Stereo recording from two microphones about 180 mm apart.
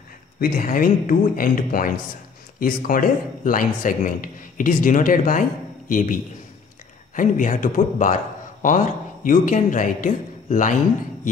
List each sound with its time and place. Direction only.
0.4 s a man's voice: 50° left (ahead or behind)
7.2 s a man's voice: 45° left (ahead or behind)